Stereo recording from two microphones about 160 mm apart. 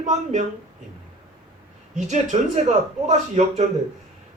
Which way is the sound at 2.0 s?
45° right (ahead or behind).